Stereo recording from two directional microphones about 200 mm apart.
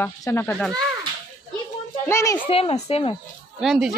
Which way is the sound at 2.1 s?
15° left (ahead or behind).